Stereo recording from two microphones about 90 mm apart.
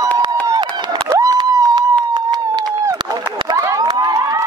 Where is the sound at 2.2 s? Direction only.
50° right (ahead or behind).